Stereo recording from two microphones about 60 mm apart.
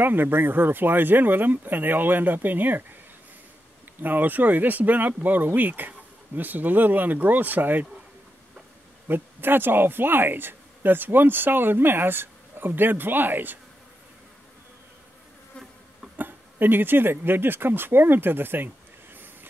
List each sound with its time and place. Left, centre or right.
0.0 s speech: right
4.0 s speech: right
9.0 s speech: right
16.2 s speech: right